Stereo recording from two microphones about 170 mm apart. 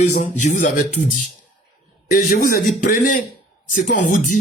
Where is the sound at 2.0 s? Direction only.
55° left (ahead or behind).